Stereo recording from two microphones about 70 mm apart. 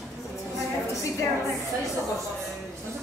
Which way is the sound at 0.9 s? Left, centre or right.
Left.